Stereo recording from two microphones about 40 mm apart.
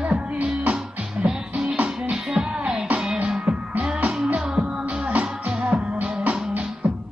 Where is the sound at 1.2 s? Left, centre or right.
Right.